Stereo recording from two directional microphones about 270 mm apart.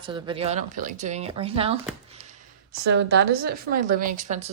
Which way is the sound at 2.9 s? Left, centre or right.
Right.